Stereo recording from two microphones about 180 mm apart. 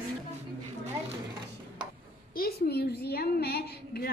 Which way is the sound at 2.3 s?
55° left (ahead or behind).